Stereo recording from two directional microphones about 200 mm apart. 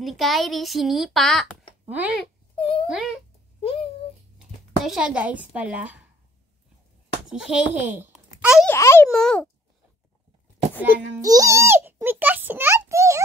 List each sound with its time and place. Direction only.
0.0 s a child's voice: centre (ahead or behind)
2.5 s a child's voice: 25° left (ahead or behind)
2.9 s a child's voice: centre (ahead or behind)
4.8 s a child's voice: 5° right (ahead or behind)
7.2 s a child's voice: 5° right (ahead or behind)
8.4 s a sound: 5° right (ahead or behind)
8.6 s a child's voice: 15° left (ahead or behind)
9.1 s a child's voice: 5° left (ahead or behind)
10.8 s a child's voice: 10° right (ahead or behind)